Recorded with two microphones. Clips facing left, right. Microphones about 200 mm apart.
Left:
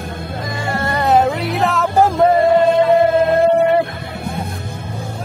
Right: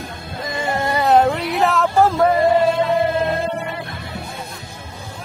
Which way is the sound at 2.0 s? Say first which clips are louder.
Left 3 dB; 15° left (ahead or behind).